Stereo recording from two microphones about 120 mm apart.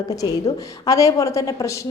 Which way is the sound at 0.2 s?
30° left (ahead or behind).